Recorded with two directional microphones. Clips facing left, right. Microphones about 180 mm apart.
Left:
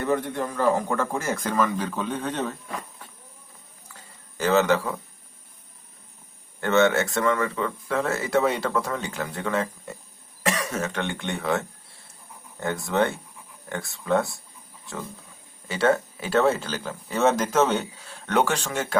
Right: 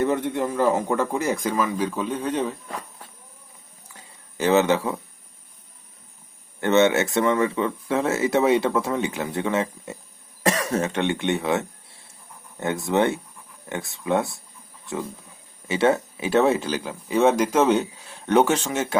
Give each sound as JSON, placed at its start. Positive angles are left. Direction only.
{"t": 0.1, "sound": "speech", "side_deg": -20}
{"t": 3.9, "sound": "a sound", "side_deg": -20}
{"t": 6.6, "sound": "speech", "side_deg": -20}
{"t": 10.4, "sound": "cough", "side_deg": -35}
{"t": 10.8, "sound": "speech", "side_deg": -25}
{"t": 12.8, "sound": "speech", "side_deg": -20}
{"t": 15.6, "sound": "speech", "side_deg": -20}